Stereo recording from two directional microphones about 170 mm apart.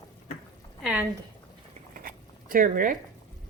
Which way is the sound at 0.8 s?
10° right (ahead or behind).